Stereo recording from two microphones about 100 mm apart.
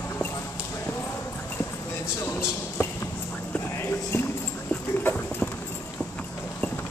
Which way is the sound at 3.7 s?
25° left (ahead or behind).